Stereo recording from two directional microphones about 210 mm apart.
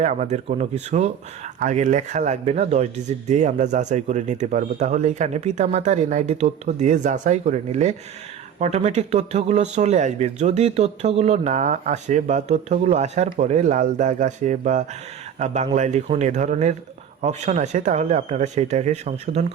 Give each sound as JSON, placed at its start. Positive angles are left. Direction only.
{"t": 0.0, "sound": "speech", "side_deg": -35}